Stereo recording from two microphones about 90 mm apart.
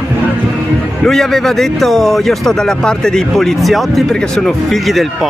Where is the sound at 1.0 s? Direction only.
5° left (ahead or behind).